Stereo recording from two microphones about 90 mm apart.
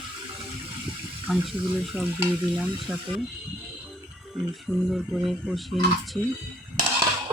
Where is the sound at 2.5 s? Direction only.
5° right (ahead or behind).